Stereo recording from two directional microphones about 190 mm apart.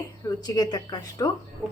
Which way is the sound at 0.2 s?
20° left (ahead or behind).